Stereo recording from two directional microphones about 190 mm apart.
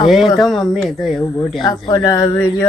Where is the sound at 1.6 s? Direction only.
20° left (ahead or behind).